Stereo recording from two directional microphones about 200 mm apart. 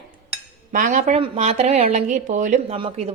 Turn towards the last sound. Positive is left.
turn(degrees=-30)  # may be behind; listen again after turning